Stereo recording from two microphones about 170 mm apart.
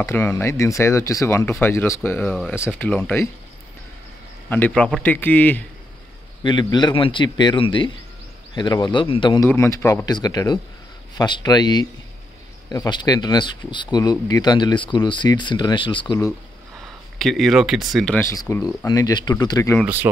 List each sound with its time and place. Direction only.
0.0 s speech: 15° left (ahead or behind)
4.5 s speech: 10° left (ahead or behind)
6.4 s speech: 25° left (ahead or behind)
9.5 s speech: 15° left (ahead or behind)
17.2 s speech: centre (ahead or behind)
18.2 s speech: 20° left (ahead or behind)
19.8 s speech: 10° right (ahead or behind)